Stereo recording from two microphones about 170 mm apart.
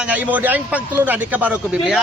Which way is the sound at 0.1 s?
10° right (ahead or behind).